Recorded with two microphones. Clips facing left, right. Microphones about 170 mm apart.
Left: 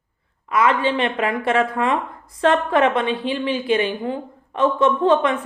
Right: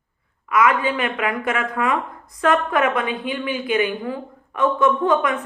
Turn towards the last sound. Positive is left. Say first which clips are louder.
# left 2 dB
turn(degrees=30)  # may be behind; listen again after turning